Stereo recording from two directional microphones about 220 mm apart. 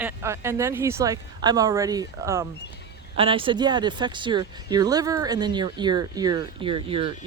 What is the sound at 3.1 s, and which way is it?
Speech, 25° right (ahead or behind).